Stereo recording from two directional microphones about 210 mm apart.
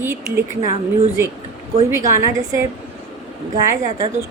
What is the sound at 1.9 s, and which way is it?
Speech, 15° right (ahead or behind).